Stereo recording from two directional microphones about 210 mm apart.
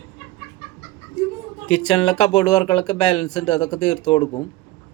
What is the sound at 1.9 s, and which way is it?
Speech, 20° left (ahead or behind).